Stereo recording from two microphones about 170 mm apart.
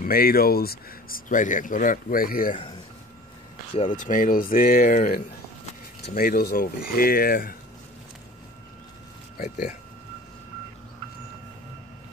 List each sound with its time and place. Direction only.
0.0 s speech: 60° left (ahead or behind)
3.7 s speech: 45° left (ahead or behind)